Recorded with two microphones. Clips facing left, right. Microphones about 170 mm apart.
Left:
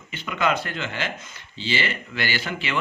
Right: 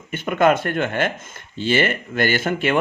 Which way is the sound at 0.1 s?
50° right (ahead or behind).